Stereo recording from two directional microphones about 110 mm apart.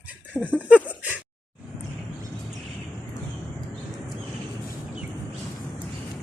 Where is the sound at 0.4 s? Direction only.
15° right (ahead or behind).